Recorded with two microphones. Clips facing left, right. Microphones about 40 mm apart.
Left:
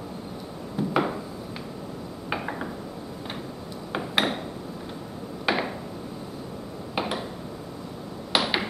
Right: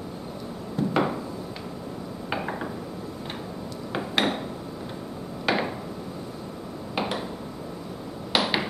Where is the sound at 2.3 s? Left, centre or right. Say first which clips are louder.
Even; centre.